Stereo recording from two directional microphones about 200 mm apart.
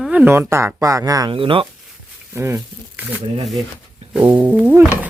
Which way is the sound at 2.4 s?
15° right (ahead or behind).